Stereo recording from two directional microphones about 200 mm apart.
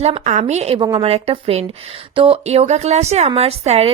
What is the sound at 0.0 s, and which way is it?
A woman's voice, 35° right (ahead or behind).